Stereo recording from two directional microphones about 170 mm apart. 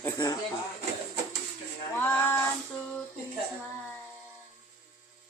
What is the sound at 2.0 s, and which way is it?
Child singing, 10° left (ahead or behind).